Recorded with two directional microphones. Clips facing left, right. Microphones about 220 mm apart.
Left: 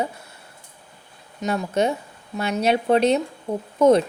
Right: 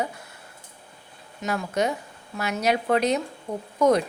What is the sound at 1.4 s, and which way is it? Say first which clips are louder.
A woman's voice: left 3 dB; 25° left (ahead or behind).